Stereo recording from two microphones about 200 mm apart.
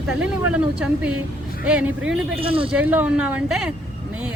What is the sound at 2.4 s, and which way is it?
Speech, 25° right (ahead or behind).